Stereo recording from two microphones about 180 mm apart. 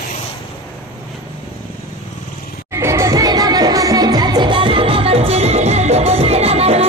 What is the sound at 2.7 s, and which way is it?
Music, 15° right (ahead or behind).